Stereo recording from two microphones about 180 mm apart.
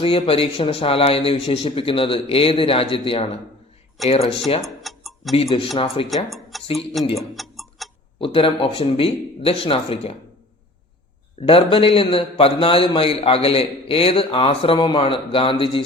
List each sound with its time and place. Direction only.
0.0 s a man's voice: 30° left (ahead or behind)
4.6 s clock: centre (ahead or behind)
5.3 s a man's voice: 35° left (ahead or behind)
6.3 s tick-tock: centre (ahead or behind)
7.3 s clock: centre (ahead or behind)
8.2 s a man's voice: 30° left (ahead or behind)
11.3 s a man's voice: 30° left (ahead or behind)